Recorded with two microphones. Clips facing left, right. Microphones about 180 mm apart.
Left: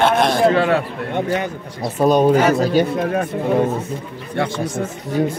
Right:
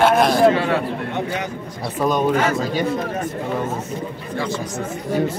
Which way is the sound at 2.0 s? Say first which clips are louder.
Left 5 dB; 35° left (ahead or behind).